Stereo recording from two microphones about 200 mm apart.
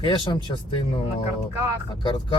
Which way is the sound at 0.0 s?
25° left (ahead or behind).